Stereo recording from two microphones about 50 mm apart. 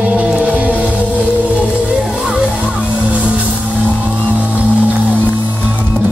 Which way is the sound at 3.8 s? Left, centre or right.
Right.